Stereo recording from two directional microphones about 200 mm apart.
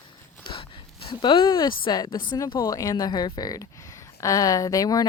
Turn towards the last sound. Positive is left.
turn(degrees=20)  # may be behind; listen again after turning